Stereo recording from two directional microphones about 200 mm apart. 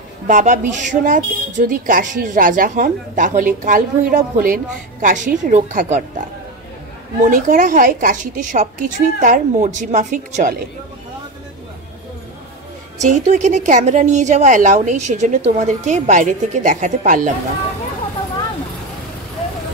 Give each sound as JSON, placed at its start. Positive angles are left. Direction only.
{"t": 0.3, "sound": "speech", "side_deg": -40}
{"t": 13.0, "sound": "speech", "side_deg": -35}